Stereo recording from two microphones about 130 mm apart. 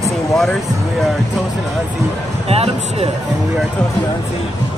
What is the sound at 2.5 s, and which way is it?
Speech, 50° right (ahead or behind).